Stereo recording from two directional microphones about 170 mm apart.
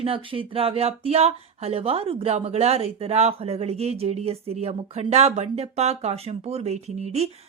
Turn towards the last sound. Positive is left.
turn(degrees=-40)  # may be behind; listen again after turning